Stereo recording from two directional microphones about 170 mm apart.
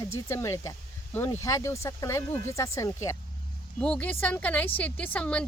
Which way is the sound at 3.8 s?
5° left (ahead or behind).